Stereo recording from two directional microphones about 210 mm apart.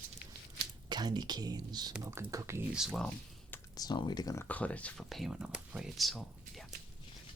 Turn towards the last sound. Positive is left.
turn(degrees=0)  # may be behind; listen again after turning